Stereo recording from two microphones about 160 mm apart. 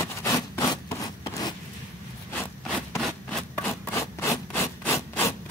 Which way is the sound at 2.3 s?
10° left (ahead or behind).